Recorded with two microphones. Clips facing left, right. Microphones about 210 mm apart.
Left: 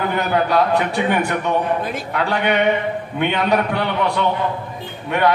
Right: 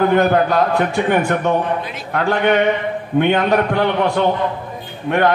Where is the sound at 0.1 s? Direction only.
50° right (ahead or behind).